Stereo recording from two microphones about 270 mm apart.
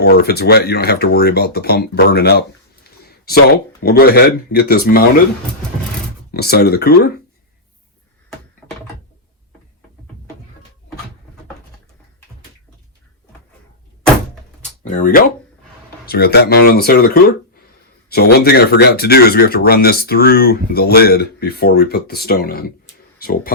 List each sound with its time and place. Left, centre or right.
0.0 s speech: left
6.3 s speech: left
14.8 s speech: left
18.1 s speech: left